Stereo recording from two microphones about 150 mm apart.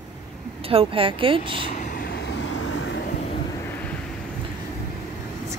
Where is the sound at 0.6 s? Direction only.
40° right (ahead or behind).